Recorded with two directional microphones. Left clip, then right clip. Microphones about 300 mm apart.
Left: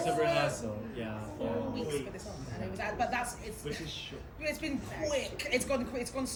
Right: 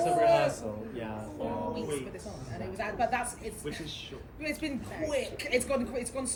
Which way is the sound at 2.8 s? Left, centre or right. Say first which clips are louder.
Right 3 dB; centre.